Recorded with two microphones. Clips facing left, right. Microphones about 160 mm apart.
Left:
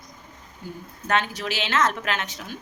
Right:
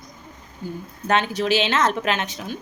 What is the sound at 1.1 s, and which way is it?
A woman's voice, 25° right (ahead or behind).